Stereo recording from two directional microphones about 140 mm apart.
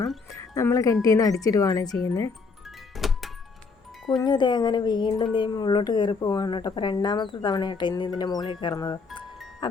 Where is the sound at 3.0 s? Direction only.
Centre (ahead or behind).